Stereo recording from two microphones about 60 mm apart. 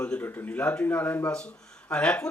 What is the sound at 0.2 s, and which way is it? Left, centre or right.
Speech, left.